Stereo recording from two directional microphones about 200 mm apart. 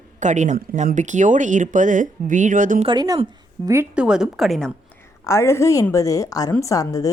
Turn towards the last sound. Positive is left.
turn(degrees=15)  # may be behind; listen again after turning